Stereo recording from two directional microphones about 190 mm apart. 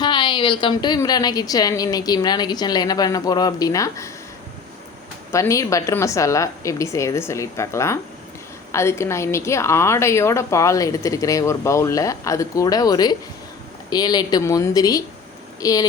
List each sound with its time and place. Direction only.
0.0 s a woman's voice: 25° left (ahead or behind)
5.3 s a woman's voice: 15° left (ahead or behind)